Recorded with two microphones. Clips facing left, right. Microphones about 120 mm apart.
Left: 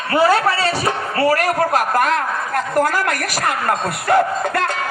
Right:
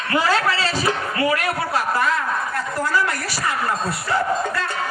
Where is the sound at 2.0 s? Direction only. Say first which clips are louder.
Left 3 dB; 65° left (ahead or behind).